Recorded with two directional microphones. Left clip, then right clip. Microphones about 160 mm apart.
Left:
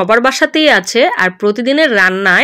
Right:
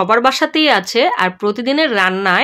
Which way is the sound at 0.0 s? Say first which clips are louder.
Left 2 dB; 15° left (ahead or behind).